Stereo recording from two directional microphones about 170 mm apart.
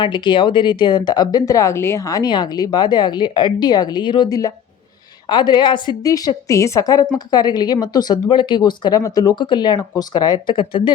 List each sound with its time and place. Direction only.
0.0 s a woman's voice: 30° left (ahead or behind)